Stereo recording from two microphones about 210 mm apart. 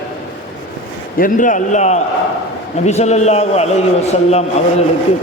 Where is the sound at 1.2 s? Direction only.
40° left (ahead or behind).